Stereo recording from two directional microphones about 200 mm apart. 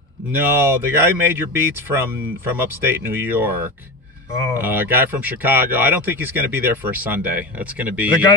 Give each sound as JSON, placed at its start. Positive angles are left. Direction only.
{"t": 0.3, "sound": "speech", "side_deg": -10}